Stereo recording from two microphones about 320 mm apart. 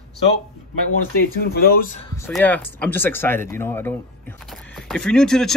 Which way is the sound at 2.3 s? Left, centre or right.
Centre.